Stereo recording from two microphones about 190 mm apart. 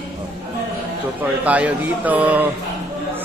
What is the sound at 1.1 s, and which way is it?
A man's voice, 5° right (ahead or behind).